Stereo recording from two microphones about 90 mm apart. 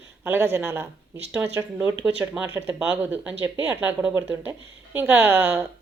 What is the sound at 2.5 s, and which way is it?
Speech, 25° right (ahead or behind).